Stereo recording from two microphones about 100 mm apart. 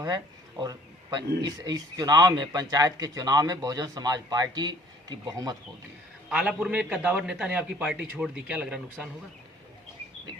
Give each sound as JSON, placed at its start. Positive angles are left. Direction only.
{"t": 0.6, "sound": "speech", "side_deg": -45}
{"t": 6.2, "sound": "a man's voice", "side_deg": -10}